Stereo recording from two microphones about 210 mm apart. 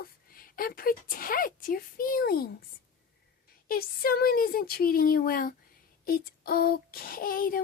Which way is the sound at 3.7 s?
45° left (ahead or behind).